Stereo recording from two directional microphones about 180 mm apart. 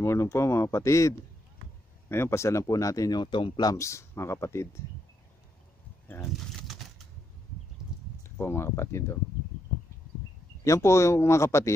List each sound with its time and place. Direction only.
0.0 s speech: 15° left (ahead or behind)
8.2 s speech: 15° left (ahead or behind)
10.6 s speech: 15° left (ahead or behind)